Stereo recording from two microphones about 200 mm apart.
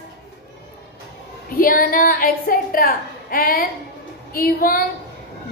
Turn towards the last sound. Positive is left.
turn(degrees=45)  # may be behind; listen again after turning